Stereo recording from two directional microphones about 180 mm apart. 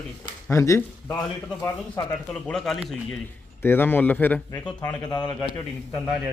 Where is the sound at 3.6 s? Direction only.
10° left (ahead or behind).